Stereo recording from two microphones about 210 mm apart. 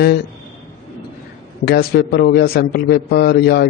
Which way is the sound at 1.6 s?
50° left (ahead or behind).